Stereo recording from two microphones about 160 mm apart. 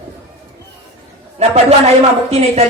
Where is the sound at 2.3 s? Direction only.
40° right (ahead or behind).